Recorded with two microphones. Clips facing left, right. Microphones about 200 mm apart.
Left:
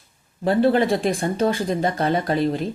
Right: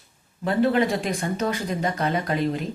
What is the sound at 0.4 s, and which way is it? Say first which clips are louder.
Speech: left 3 dB; 30° left (ahead or behind).